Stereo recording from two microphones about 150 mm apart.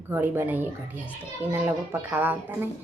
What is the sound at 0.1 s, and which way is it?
Speech, 15° right (ahead or behind).